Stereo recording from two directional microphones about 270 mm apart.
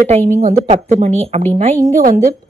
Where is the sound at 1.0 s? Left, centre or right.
Right.